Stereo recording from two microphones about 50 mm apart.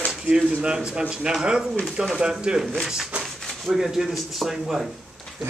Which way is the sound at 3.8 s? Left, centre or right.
Centre.